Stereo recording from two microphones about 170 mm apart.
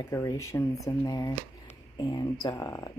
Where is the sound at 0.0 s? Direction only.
20° left (ahead or behind).